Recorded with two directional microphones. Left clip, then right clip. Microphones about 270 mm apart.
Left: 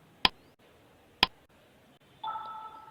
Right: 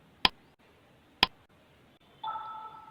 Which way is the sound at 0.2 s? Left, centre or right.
Centre.